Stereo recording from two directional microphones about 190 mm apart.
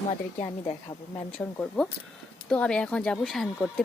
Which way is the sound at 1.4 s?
5° left (ahead or behind).